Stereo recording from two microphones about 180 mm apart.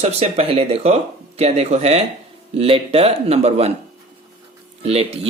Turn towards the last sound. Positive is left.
turn(degrees=-35)  # may be behind; listen again after turning